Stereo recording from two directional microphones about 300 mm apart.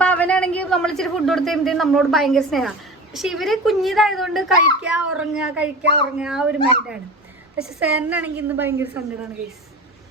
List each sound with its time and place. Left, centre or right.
0.0 s a man's voice: centre